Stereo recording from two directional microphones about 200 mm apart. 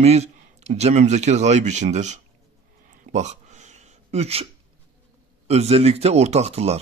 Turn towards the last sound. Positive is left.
turn(degrees=-30)  # may be behind; listen again after turning